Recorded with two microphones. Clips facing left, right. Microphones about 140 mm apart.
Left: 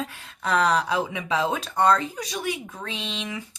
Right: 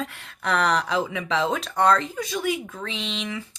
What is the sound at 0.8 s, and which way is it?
Speech, 10° left (ahead or behind).